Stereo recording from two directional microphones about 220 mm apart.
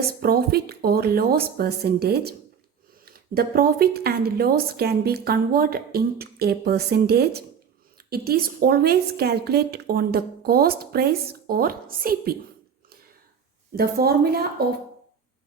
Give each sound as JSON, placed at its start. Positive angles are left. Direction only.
{"t": 0.2, "sound": "a woman's voice", "side_deg": -45}
{"t": 13.7, "sound": "a woman's voice", "side_deg": -45}